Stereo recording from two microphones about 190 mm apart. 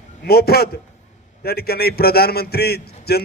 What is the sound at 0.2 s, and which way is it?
A man's voice, 55° left (ahead or behind).